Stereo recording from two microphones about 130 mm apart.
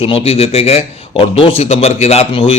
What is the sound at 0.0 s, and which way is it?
Speech, 45° left (ahead or behind).